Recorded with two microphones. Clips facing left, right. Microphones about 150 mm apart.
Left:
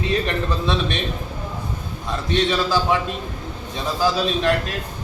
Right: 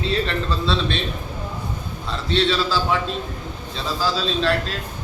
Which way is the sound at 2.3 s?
15° left (ahead or behind).